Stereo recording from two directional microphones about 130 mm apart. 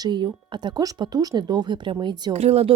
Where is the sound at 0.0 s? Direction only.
35° right (ahead or behind).